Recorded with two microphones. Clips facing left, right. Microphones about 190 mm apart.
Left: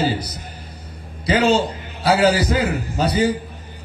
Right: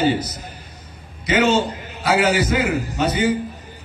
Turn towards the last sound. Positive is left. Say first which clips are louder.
# left 1 dB
turn(degrees=35)  # may be behind; listen again after turning